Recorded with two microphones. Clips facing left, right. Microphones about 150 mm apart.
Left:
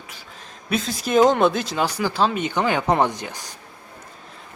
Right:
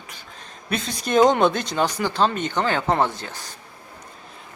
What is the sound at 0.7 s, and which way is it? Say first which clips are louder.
Speech: left 2 dB; 5° left (ahead or behind).